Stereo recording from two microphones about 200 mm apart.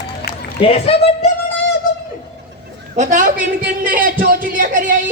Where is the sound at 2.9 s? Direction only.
40° right (ahead or behind).